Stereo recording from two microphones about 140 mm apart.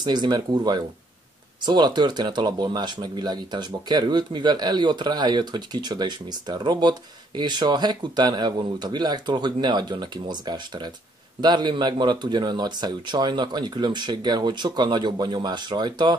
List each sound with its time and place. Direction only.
0.0 s speech: 30° right (ahead or behind)